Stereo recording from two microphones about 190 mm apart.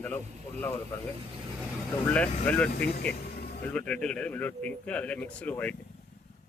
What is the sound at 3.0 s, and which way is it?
Music, 55° left (ahead or behind).